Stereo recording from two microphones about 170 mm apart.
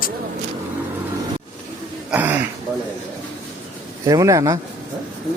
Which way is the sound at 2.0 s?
10° right (ahead or behind).